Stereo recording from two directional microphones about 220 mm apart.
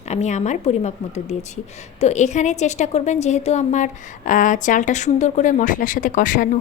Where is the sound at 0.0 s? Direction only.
30° left (ahead or behind).